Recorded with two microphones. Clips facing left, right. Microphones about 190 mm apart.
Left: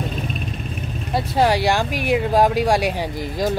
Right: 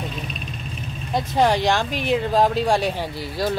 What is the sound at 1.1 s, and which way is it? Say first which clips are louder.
Speech: left 1 dB; 10° left (ahead or behind).